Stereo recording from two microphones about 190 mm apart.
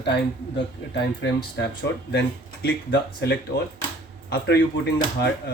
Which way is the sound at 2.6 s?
65° left (ahead or behind).